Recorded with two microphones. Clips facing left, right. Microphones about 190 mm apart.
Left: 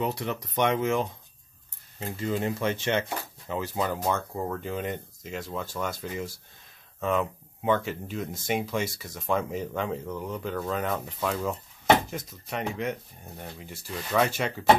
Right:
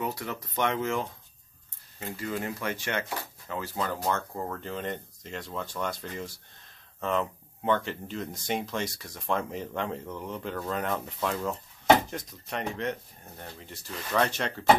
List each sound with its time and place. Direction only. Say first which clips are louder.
0.0 s speech: left 4 dB; 20° left (ahead or behind)